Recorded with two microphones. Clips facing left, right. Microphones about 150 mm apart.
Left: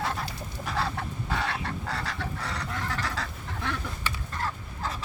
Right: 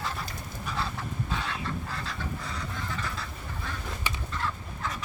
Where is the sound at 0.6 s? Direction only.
70° left (ahead or behind).